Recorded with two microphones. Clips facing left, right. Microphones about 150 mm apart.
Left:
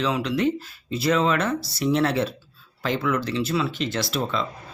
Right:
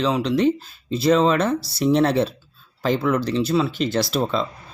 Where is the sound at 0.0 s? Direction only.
30° right (ahead or behind).